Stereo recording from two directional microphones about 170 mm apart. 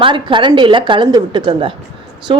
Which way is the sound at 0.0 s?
30° right (ahead or behind).